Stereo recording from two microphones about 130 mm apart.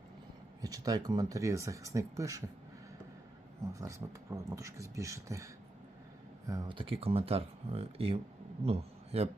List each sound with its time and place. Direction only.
0.6 s speech: 30° right (ahead or behind)
3.8 s speech: 25° right (ahead or behind)
6.5 s a man's voice: 40° right (ahead or behind)